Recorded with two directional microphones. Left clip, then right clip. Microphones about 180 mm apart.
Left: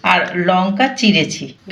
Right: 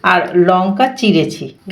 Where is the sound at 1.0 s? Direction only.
40° right (ahead or behind).